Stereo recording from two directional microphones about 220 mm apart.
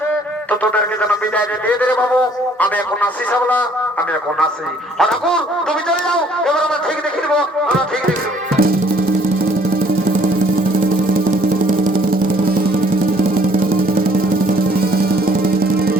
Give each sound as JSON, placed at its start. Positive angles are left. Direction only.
{"t": 0.6, "sound": "speech", "side_deg": 5}
{"t": 4.9, "sound": "speech", "side_deg": 0}
{"t": 8.5, "sound": "music", "side_deg": -40}
{"t": 11.6, "sound": "music", "side_deg": -40}